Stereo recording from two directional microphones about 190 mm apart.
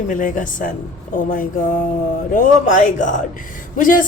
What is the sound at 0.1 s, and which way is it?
Speech, 45° left (ahead or behind).